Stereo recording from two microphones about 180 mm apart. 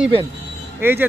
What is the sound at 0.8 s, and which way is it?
Speech, 10° right (ahead or behind).